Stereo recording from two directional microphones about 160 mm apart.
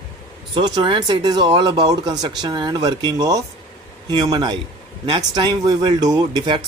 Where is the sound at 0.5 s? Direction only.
30° right (ahead or behind).